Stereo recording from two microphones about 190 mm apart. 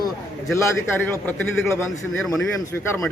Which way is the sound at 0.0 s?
15° left (ahead or behind).